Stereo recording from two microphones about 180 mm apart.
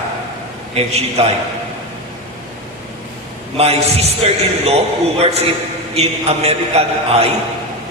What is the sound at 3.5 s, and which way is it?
A man's voice, 35° right (ahead or behind).